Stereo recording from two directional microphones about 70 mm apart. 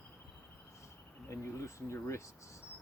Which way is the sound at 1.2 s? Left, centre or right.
Left.